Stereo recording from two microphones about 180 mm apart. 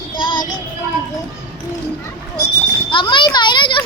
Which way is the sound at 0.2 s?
25° left (ahead or behind).